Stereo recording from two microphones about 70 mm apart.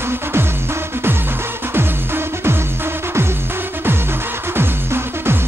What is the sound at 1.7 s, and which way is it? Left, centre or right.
Music, right.